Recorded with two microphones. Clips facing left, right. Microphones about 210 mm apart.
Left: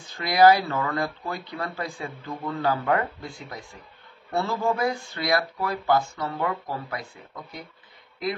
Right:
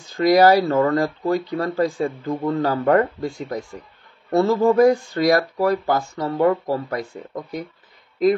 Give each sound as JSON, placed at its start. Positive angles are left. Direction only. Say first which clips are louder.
{"t": 0.0, "sound": "speech", "louder": "right 4 dB", "side_deg": -40}